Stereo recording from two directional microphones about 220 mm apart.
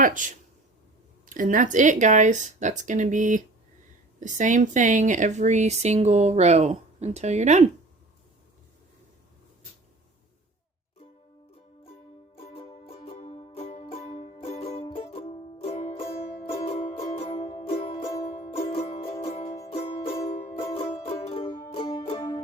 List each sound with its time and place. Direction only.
0.0 s speech: 35° right (ahead or behind)
1.3 s speech: 35° right (ahead or behind)
12.4 s music: 25° left (ahead or behind)